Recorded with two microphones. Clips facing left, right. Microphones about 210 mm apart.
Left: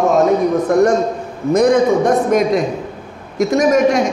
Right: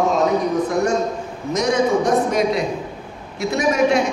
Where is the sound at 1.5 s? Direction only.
55° left (ahead or behind).